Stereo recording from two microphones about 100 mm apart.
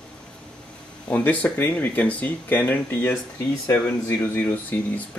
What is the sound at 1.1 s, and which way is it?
Speech, 15° left (ahead or behind).